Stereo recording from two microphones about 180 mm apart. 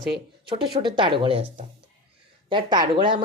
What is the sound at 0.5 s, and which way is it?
Speech, 25° right (ahead or behind).